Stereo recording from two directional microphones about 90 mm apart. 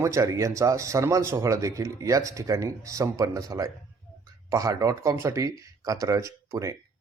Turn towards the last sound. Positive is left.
turn(degrees=-35)  # may be behind; listen again after turning